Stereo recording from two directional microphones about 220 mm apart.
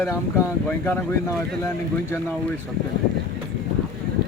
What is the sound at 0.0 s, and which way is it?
Speech, 15° left (ahead or behind).